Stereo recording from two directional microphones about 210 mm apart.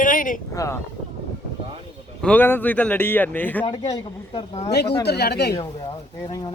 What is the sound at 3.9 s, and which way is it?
Speech, 25° left (ahead or behind).